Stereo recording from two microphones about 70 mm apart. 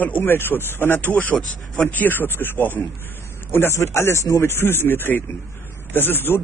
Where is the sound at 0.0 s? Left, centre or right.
Left.